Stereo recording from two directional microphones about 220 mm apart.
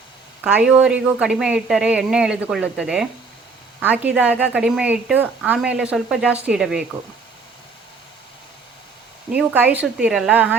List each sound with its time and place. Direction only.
0.4 s speech: 5° right (ahead or behind)
9.3 s speech: 5° right (ahead or behind)